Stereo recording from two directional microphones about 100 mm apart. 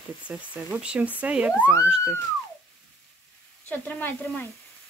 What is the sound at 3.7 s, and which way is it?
Speech, 20° left (ahead or behind).